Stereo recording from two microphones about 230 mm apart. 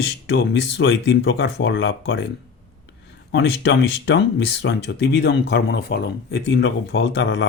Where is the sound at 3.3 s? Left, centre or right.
Left.